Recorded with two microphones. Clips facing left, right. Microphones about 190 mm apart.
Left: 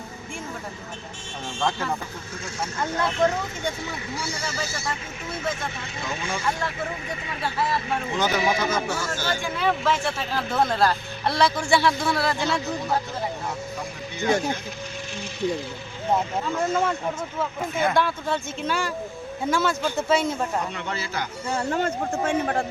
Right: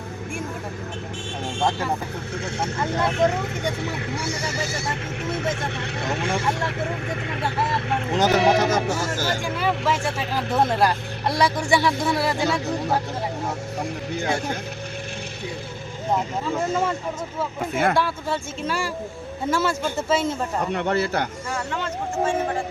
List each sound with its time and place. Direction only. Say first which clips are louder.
2.3 s speech: right 4 dB; 65° right (ahead or behind)
8.7 s speech: right 4 dB; 40° right (ahead or behind)
9.2 s speech: left 1 dB; 10° right (ahead or behind)
17.9 s speech: even; 5° right (ahead or behind)
20.7 s speech: right 8 dB; 60° right (ahead or behind)
21.7 s a man's voice: left 3 dB; 50° left (ahead or behind)